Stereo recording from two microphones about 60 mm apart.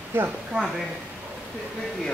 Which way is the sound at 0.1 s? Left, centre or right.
Right.